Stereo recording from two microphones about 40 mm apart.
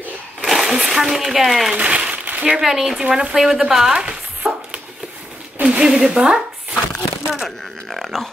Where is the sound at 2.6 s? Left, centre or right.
Centre.